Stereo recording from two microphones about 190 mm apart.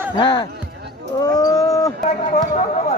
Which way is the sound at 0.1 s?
25° left (ahead or behind).